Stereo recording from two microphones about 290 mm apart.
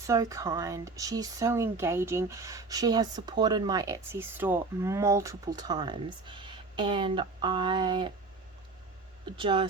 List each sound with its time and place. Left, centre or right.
0.1 s speech: centre
9.2 s speech: centre